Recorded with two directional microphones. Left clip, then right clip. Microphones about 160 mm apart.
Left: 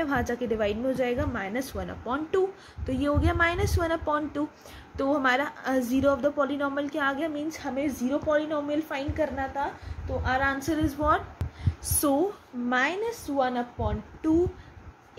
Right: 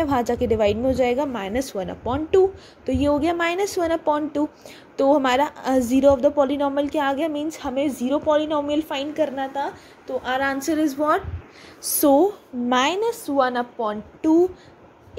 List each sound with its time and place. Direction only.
0.0 s a woman's voice: 30° right (ahead or behind)